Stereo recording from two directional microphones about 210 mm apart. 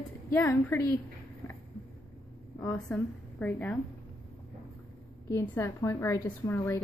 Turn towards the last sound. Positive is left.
turn(degrees=10)  # may be behind; listen again after turning